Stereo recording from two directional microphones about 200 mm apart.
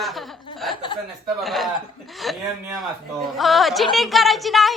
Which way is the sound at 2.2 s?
Centre (ahead or behind).